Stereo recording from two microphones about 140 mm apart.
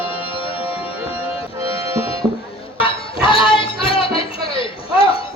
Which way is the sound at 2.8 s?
40° left (ahead or behind).